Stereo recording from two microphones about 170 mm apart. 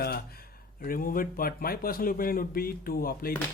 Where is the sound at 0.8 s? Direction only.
55° left (ahead or behind).